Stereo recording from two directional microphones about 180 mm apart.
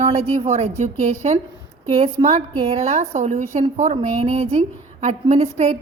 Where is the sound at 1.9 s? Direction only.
35° right (ahead or behind).